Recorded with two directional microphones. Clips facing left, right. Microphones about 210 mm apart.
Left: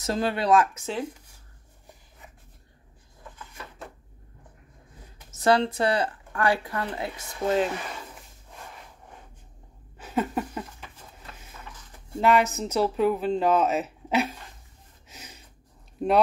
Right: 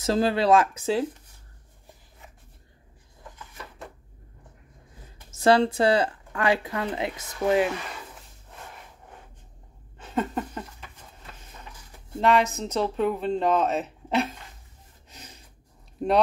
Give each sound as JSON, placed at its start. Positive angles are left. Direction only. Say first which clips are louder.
{"t": 0.0, "sound": "speech", "louder": "right 4 dB", "side_deg": -30}
{"t": 5.4, "sound": "speech", "louder": "right 2 dB", "side_deg": -30}
{"t": 9.9, "sound": "a sound", "louder": "left 1 dB", "side_deg": 5}
{"t": 12.2, "sound": "speech", "louder": "even", "side_deg": 5}
{"t": 15.0, "sound": "a sound", "louder": "left 1 dB", "side_deg": 5}
{"t": 16.0, "sound": "speech", "louder": "even", "side_deg": 0}